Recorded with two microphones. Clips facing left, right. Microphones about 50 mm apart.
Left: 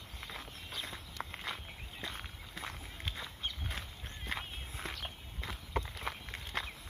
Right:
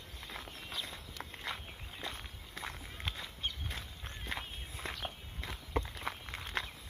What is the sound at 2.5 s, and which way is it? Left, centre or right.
Run, centre.